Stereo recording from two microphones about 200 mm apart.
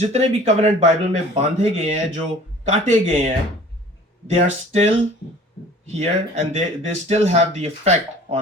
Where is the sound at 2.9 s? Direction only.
35° right (ahead or behind).